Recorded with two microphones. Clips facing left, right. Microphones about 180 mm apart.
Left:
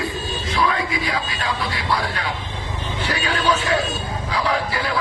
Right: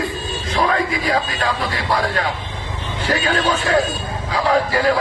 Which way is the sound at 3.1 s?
45° right (ahead or behind).